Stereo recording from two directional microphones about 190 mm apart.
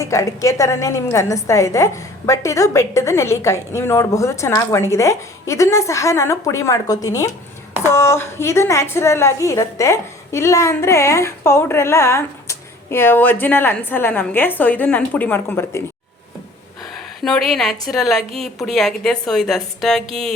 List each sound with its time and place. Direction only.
0.0 s a woman's voice: 15° left (ahead or behind)
16.9 s a woman's voice: centre (ahead or behind)